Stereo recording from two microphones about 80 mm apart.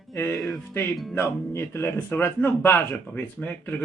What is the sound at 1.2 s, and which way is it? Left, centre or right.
Speech, left.